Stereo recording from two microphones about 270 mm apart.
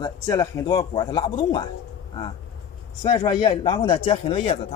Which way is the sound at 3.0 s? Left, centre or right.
Centre.